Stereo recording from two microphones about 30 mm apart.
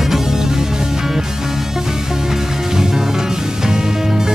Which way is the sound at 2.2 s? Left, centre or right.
Centre.